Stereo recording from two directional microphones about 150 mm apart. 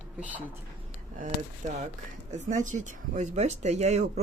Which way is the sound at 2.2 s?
55° right (ahead or behind).